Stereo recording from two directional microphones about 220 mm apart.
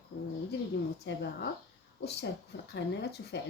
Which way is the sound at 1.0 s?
50° left (ahead or behind).